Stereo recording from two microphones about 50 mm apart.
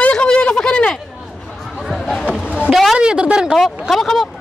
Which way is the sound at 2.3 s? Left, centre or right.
Right.